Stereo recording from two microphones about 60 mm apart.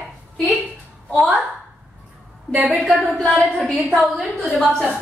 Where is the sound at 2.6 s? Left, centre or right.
Centre.